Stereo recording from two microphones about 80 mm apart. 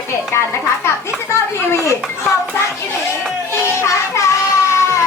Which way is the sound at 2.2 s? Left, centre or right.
Left.